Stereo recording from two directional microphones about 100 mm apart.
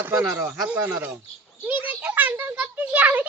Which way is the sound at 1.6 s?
15° right (ahead or behind).